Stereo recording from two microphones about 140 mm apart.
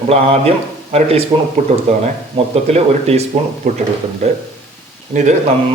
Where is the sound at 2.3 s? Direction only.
45° right (ahead or behind).